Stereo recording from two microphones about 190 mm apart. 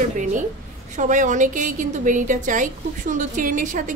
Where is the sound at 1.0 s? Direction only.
40° right (ahead or behind).